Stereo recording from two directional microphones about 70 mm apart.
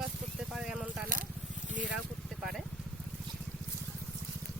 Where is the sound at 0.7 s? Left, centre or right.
Centre.